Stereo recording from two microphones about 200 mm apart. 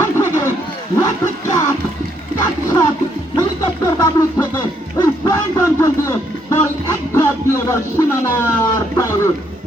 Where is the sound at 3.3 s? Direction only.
15° left (ahead or behind).